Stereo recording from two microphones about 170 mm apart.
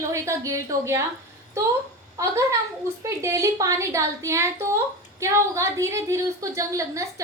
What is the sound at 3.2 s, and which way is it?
A woman's voice, 20° right (ahead or behind).